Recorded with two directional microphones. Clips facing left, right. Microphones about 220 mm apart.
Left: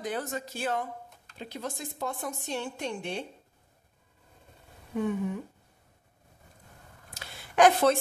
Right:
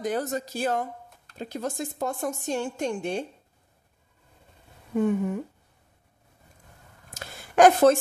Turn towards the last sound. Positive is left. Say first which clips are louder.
# right 5 dB
turn(degrees=-45)  # may be behind; listen again after turning